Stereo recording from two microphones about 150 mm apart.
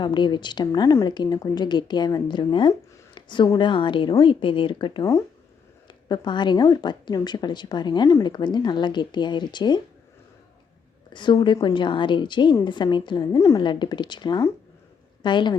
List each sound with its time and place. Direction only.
0.0 s a woman's voice: 30° left (ahead or behind)
11.1 s a woman's voice: 30° left (ahead or behind)